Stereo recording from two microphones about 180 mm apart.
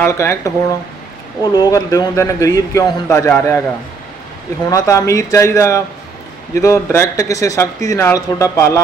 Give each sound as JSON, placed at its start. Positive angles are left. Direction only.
{"t": 0.0, "sound": "a man's voice", "side_deg": 15}
{"t": 4.6, "sound": "a man's voice", "side_deg": 20}